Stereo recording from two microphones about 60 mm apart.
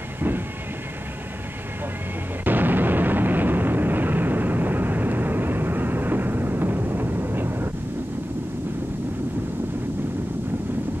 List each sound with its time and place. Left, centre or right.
2.4 s explosion: right